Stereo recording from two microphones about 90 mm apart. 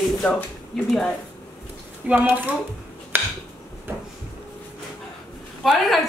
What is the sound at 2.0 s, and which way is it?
Speech, 20° right (ahead or behind).